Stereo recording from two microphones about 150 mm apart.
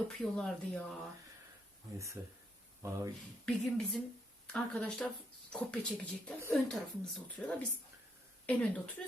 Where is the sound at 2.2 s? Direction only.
20° right (ahead or behind).